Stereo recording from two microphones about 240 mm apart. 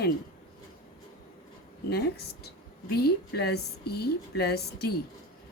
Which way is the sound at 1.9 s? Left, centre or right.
Left.